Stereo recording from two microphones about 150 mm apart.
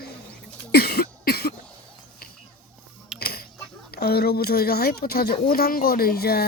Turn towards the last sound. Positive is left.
turn(degrees=90)